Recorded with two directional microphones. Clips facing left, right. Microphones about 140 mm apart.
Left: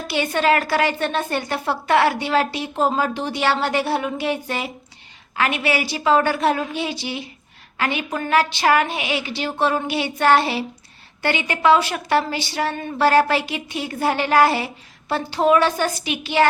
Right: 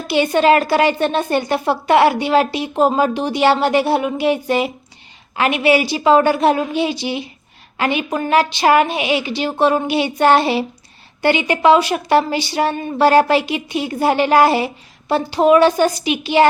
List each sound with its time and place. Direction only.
0.3 s a woman's voice: 20° right (ahead or behind)